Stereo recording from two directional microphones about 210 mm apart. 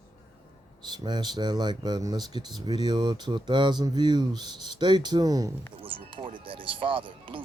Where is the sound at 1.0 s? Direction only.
20° right (ahead or behind).